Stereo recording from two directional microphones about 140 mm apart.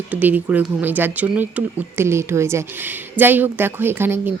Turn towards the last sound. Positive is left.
turn(degrees=-15)  # may be behind; listen again after turning